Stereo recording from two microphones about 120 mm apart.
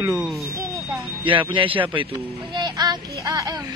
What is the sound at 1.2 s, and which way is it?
Speech, 45° right (ahead or behind).